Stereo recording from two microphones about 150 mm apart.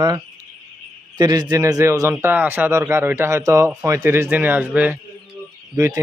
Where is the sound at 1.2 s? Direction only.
30° right (ahead or behind); by 4.9 s 10° right (ahead or behind).